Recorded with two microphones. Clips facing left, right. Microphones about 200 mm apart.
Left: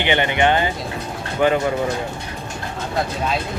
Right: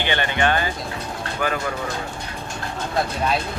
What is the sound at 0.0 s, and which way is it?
Speech, 20° left (ahead or behind).